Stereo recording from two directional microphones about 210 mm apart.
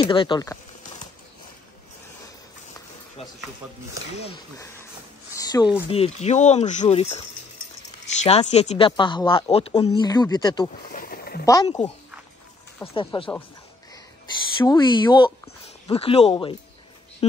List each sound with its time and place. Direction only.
0.0 s speech: 25° left (ahead or behind)
3.2 s speech: 30° left (ahead or behind)
5.3 s speech: 20° left (ahead or behind)
10.9 s a sound: 45° left (ahead or behind)
11.4 s speech: 15° left (ahead or behind)
14.6 s speech: 20° left (ahead or behind)